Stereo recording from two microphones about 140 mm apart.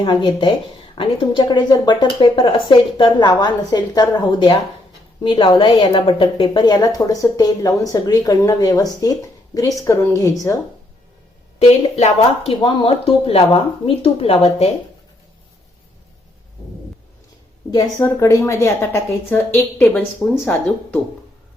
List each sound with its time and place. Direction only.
0.0 s a woman's voice: 35° left (ahead or behind)
11.6 s a woman's voice: 50° left (ahead or behind)
18.0 s a woman's voice: 20° left (ahead or behind)